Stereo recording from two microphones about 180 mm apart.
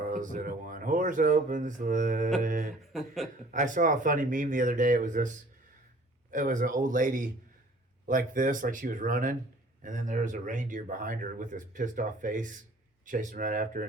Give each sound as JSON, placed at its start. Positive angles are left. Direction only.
{"t": 0.0, "sound": "speech", "side_deg": -45}
{"t": 6.3, "sound": "speech", "side_deg": -45}